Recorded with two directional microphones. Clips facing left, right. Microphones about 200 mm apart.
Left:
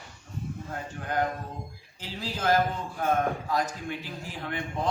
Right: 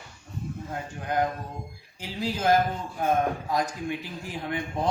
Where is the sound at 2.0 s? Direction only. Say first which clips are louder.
Right 4 dB; 15° right (ahead or behind).